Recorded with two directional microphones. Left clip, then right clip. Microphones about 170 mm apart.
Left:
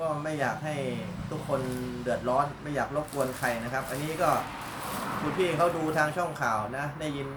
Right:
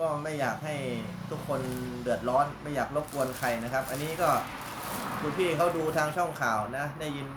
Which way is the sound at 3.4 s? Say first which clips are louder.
Even; 15° right (ahead or behind).